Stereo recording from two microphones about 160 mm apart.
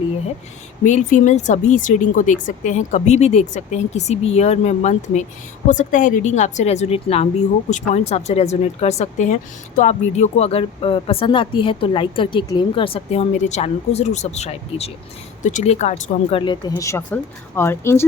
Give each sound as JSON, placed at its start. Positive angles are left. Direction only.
{"t": 0.9, "sound": "speech", "side_deg": 50}
{"t": 16.4, "sound": "speech", "side_deg": 25}